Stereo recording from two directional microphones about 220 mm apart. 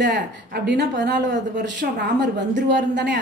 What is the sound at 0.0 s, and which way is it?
A woman's voice, 50° right (ahead or behind).